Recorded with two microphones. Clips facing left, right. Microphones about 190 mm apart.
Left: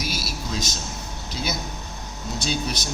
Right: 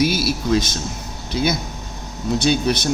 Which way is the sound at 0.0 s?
60° right (ahead or behind).